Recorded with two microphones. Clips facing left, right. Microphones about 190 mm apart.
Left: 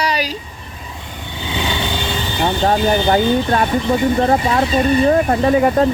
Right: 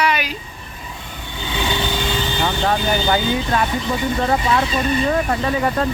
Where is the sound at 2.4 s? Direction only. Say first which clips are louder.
Left 6 dB; 35° left (ahead or behind).